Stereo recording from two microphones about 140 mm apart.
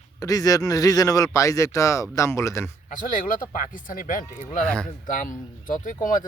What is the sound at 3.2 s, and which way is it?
Speech, 75° left (ahead or behind).